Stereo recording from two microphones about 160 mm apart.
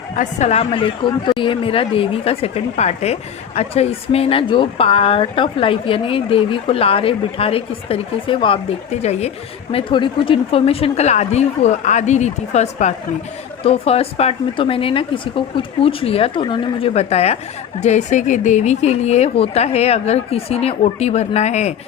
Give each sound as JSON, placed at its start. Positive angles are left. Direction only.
{"t": 0.2, "sound": "speech", "side_deg": 45}
{"t": 9.7, "sound": "speech", "side_deg": 30}